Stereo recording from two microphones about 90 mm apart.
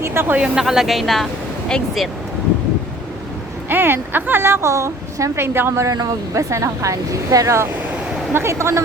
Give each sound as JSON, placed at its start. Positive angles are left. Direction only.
{"t": 0.0, "sound": "a woman's voice", "side_deg": -25}
{"t": 0.3, "sound": "a woman's voice", "side_deg": -10}
{"t": 3.7, "sound": "a woman's voice", "side_deg": -25}
{"t": 5.9, "sound": "a woman's voice", "side_deg": -40}